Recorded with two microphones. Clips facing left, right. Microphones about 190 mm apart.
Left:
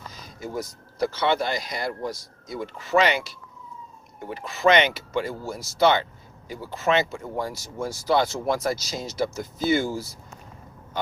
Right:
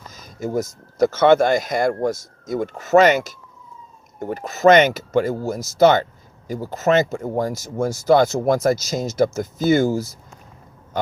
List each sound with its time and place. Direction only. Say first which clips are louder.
0.1 s speech: right 9 dB; 45° right (ahead or behind)